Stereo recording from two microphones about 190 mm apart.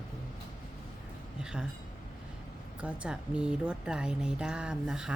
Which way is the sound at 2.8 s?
5° right (ahead or behind).